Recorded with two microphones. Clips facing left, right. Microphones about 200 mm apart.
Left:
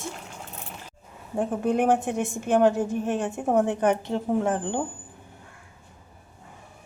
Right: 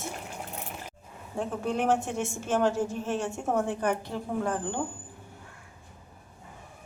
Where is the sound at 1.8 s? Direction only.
55° left (ahead or behind).